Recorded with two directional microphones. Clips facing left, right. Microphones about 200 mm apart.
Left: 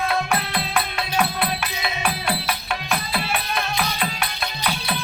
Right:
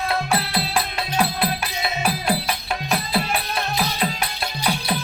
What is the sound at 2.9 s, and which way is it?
Music, 35° right (ahead or behind).